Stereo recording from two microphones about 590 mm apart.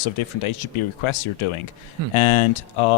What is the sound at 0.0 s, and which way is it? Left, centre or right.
Speech, left.